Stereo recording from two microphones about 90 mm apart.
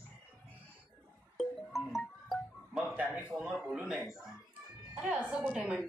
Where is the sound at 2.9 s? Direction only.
15° right (ahead or behind).